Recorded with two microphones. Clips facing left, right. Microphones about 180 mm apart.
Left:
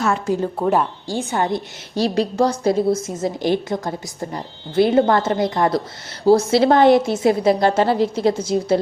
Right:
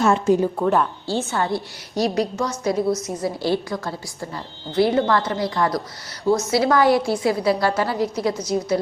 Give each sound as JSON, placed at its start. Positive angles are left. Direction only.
{"t": 0.0, "sound": "a woman's voice", "side_deg": -25}
{"t": 0.6, "sound": "a woman's voice", "side_deg": 10}